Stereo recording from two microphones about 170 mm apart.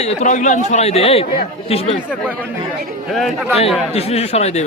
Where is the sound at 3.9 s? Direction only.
40° left (ahead or behind).